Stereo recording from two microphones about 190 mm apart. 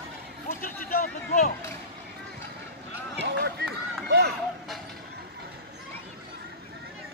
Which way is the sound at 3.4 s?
60° right (ahead or behind).